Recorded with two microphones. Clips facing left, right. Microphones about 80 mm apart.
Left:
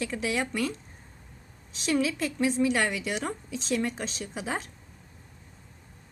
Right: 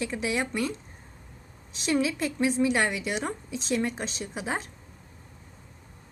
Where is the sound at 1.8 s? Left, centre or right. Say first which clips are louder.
Right 1 dB; centre.